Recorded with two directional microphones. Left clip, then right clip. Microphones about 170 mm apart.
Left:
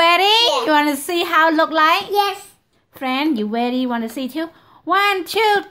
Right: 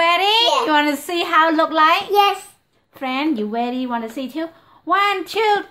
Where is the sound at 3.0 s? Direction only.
35° left (ahead or behind).